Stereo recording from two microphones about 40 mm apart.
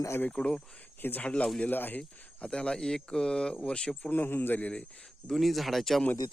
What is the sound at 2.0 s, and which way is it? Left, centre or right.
Speech, left.